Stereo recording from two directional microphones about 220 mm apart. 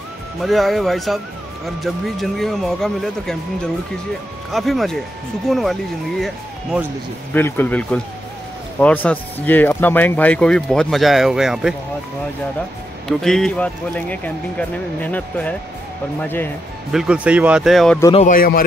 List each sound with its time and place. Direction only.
0.4 s speech: centre (ahead or behind)
7.3 s speech: 10° left (ahead or behind)
13.2 s speech: centre (ahead or behind)
16.9 s speech: 5° right (ahead or behind)
18.1 s a man's voice: 35° left (ahead or behind)